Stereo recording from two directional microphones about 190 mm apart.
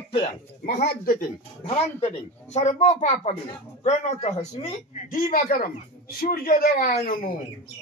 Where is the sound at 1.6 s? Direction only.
35° left (ahead or behind).